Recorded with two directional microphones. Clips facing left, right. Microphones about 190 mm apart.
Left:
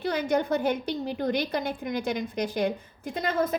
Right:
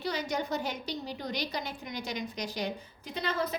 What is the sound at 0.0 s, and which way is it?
A woman's voice, 55° left (ahead or behind).